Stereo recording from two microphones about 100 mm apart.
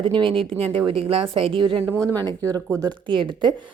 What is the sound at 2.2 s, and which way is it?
Speech, 40° right (ahead or behind).